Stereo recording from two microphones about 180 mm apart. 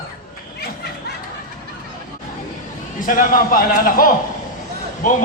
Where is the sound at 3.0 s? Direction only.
50° left (ahead or behind).